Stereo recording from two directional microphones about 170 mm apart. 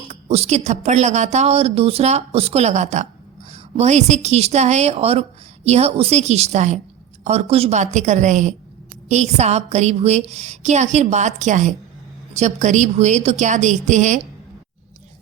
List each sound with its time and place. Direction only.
0.1 s a woman's voice: 40° right (ahead or behind)